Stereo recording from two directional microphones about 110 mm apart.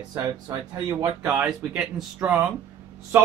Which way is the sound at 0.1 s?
30° right (ahead or behind).